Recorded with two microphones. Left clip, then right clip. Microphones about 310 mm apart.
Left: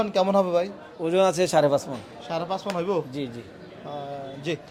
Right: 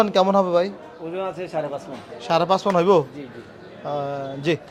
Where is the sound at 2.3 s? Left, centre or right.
Right.